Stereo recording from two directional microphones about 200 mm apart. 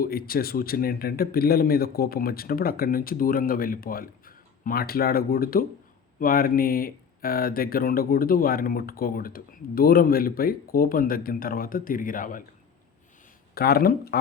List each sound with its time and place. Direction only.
0.0 s speech: 50° left (ahead or behind)
13.5 s speech: 50° left (ahead or behind)